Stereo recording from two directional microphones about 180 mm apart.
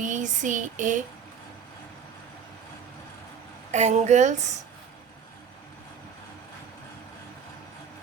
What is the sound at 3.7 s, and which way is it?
Speech, 40° right (ahead or behind).